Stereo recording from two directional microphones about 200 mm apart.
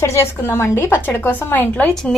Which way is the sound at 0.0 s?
15° left (ahead or behind).